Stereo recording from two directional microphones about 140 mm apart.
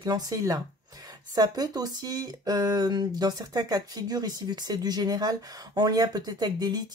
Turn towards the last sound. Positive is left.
turn(degrees=-30)  # may be behind; listen again after turning